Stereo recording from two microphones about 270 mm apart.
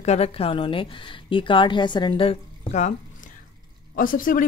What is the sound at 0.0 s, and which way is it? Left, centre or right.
A woman's voice, left.